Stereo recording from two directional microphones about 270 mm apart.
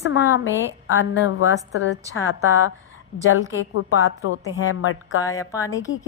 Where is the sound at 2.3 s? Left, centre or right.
Left.